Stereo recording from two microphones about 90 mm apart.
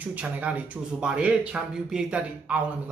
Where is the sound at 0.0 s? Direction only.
15° right (ahead or behind).